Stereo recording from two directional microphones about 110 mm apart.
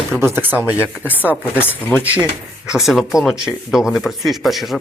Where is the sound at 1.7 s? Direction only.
20° left (ahead or behind).